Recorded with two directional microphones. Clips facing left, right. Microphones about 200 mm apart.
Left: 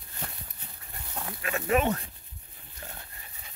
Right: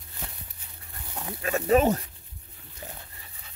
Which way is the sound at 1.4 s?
35° right (ahead or behind).